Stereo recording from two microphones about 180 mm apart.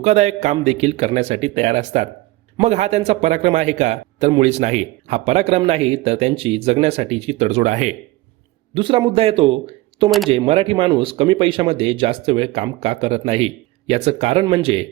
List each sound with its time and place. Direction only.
0.0 s speech: 40° right (ahead or behind)
8.7 s speech: 30° right (ahead or behind)